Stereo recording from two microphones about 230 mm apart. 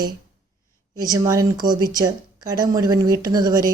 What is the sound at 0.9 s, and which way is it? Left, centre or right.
Speech, centre.